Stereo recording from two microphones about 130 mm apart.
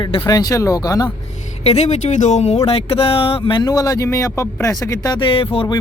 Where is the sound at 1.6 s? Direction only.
60° left (ahead or behind).